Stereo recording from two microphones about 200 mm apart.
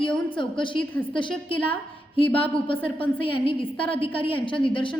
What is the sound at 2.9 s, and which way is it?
A woman's voice, 25° left (ahead or behind).